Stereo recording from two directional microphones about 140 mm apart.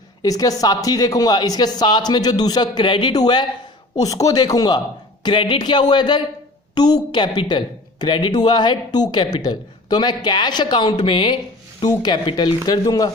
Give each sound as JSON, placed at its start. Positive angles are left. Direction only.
{"t": 0.2, "sound": "speech", "side_deg": 25}